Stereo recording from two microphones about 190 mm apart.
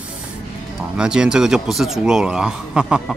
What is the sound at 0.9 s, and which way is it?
Speech, 5° right (ahead or behind).